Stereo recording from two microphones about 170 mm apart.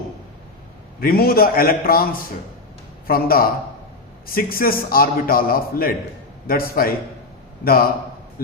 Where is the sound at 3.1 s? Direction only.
60° left (ahead or behind).